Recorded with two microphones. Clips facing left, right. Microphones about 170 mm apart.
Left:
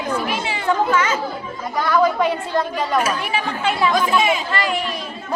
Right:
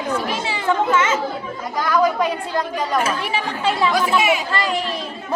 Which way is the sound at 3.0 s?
30° right (ahead or behind).